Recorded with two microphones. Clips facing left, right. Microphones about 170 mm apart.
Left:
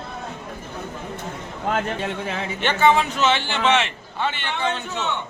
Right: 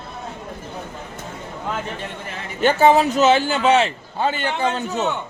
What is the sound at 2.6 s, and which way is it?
A man's voice, 40° right (ahead or behind).